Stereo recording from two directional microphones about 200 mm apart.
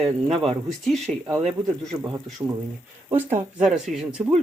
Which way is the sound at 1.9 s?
20° right (ahead or behind).